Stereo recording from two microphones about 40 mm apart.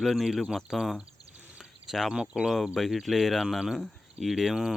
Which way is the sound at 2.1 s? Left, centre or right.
Centre.